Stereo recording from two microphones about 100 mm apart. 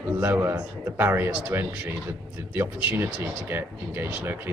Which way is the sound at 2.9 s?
20° right (ahead or behind).